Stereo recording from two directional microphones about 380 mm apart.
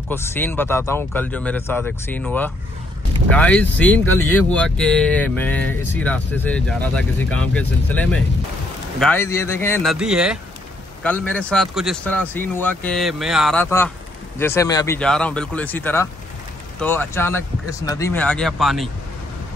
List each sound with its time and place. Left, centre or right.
0.1 s speech: centre